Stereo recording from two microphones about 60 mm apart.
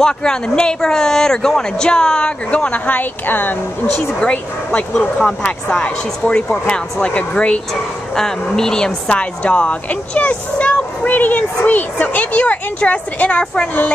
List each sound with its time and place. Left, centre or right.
0.0 s speech: centre; by 3.5 s left
5.4 s speech: centre
8.2 s speech: centre